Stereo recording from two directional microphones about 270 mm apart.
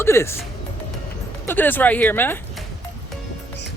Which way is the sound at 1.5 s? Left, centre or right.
Centre.